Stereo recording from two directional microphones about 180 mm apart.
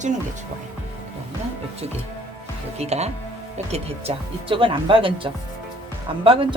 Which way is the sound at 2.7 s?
35° right (ahead or behind).